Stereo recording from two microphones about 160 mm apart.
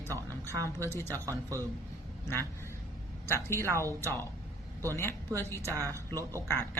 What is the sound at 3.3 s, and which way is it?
Speech, 15° left (ahead or behind).